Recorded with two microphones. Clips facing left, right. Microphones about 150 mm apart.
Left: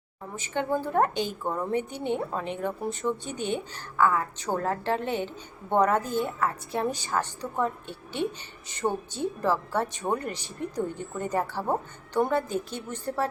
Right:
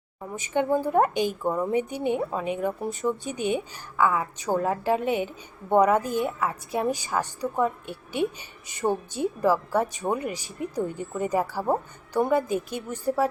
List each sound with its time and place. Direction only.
0.3 s a woman's voice: 15° right (ahead or behind); by 3.2 s centre (ahead or behind)
3.2 s a woman's voice: 10° right (ahead or behind)
7.9 s a woman's voice: 25° left (ahead or behind)
8.7 s a woman's voice: 15° right (ahead or behind)